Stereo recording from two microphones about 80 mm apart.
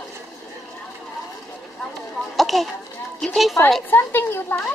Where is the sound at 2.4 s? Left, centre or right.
Centre.